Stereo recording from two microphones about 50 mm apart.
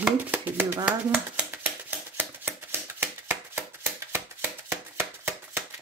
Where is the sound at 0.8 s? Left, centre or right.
Right.